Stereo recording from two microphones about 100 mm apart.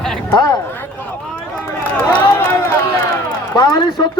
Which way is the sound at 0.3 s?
40° left (ahead or behind).